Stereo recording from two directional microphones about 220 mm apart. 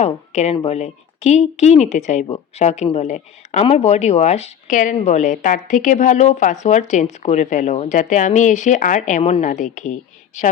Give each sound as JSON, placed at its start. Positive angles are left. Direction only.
{"t": 0.0, "sound": "speech", "side_deg": 30}